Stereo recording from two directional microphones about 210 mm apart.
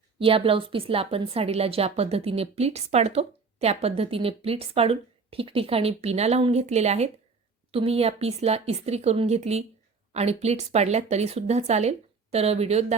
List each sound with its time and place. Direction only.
0.2 s a woman's voice: 25° right (ahead or behind)